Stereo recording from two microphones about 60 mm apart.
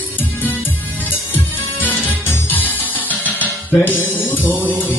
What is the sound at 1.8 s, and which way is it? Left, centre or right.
Music, left.